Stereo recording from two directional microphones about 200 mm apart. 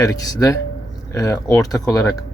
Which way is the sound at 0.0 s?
15° left (ahead or behind).